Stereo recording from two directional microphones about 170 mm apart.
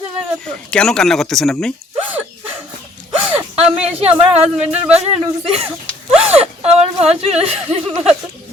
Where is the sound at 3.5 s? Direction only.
35° right (ahead or behind).